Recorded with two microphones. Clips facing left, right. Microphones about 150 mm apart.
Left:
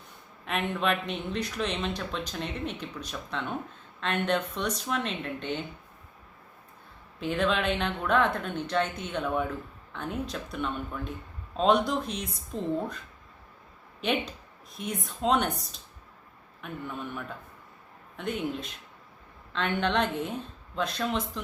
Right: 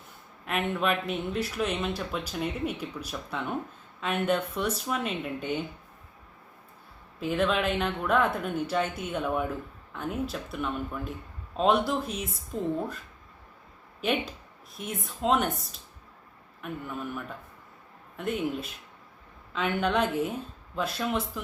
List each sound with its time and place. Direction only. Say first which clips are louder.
0.4 s speech: right 1 dB; 5° right (ahead or behind)
7.2 s speech: right 1 dB; 5° right (ahead or behind)
14.0 s speech: even; 5° right (ahead or behind)